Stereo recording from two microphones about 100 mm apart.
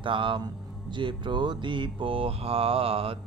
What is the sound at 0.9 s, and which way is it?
Speech, 50° right (ahead or behind).